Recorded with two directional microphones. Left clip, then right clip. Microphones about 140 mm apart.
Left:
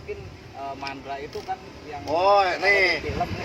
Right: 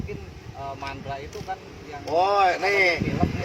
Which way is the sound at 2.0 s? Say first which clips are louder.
Left 1 dB; 25° left (ahead or behind).